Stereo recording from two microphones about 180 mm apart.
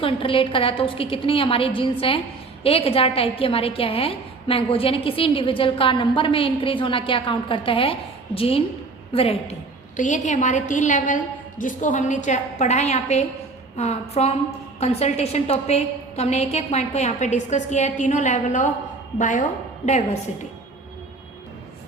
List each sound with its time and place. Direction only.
0.0 s a woman's voice: 30° left (ahead or behind)